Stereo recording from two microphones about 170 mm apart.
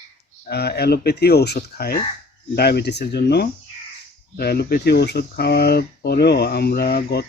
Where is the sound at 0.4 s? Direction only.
70° left (ahead or behind).